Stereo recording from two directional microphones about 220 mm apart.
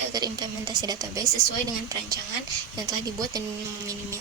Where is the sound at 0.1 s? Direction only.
20° right (ahead or behind).